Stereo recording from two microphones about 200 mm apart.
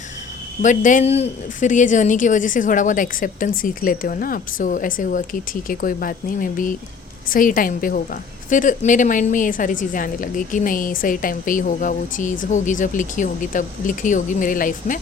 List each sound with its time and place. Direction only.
0.6 s a woman's voice: 40° left (ahead or behind)